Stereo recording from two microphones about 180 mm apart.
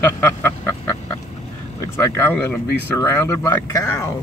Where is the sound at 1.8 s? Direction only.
15° left (ahead or behind).